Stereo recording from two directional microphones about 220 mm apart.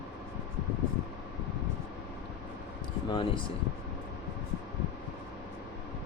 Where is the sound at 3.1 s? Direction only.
20° left (ahead or behind).